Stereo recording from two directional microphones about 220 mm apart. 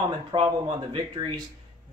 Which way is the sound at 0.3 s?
20° right (ahead or behind).